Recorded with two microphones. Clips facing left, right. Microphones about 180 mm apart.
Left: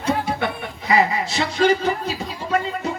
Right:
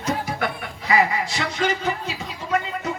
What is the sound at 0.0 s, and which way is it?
Chuckle, 25° left (ahead or behind).